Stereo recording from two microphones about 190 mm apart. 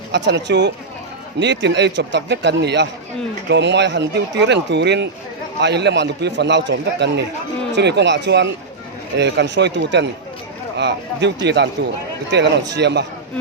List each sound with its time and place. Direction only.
0.1 s a man's voice: 65° right (ahead or behind)